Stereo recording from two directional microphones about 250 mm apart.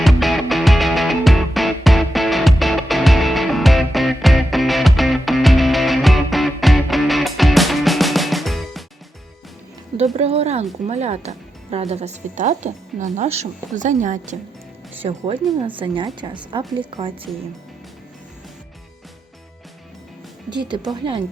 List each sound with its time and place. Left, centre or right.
0.0 s music: centre
10.2 s a sound: right
10.8 s speech: right
20.5 s a woman's voice: centre